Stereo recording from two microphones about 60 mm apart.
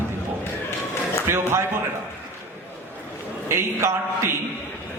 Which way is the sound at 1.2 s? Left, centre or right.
Right.